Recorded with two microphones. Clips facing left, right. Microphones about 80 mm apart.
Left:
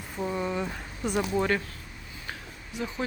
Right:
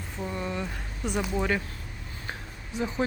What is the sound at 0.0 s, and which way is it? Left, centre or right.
Speech, centre.